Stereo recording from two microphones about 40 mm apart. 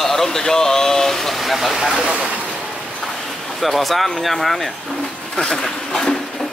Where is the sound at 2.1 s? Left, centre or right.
Right.